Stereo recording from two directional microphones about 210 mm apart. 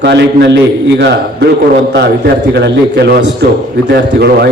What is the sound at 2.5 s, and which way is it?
A man's voice, 55° right (ahead or behind).